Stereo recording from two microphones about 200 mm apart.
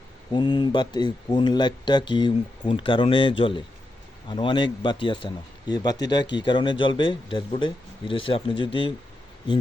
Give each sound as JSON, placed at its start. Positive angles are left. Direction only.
{"t": 0.3, "sound": "speech", "side_deg": 25}